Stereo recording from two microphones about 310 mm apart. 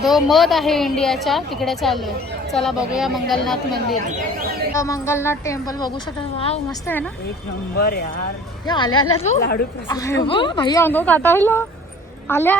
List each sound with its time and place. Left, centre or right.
0.0 s a woman's voice: centre
7.8 s speech: left
8.6 s a woman's voice: centre
9.4 s a woman's voice: left
9.9 s a woman's voice: centre